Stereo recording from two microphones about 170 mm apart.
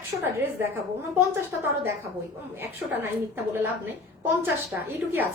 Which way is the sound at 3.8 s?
10° right (ahead or behind).